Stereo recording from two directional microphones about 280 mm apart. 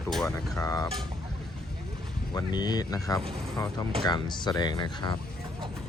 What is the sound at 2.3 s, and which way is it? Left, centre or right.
Speech, centre.